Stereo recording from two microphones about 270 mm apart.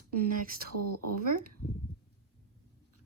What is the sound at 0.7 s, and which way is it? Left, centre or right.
Speech, right.